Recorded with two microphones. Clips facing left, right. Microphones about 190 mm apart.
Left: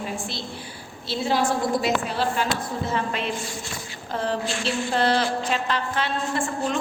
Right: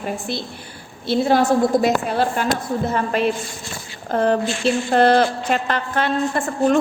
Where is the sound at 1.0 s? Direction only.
55° right (ahead or behind).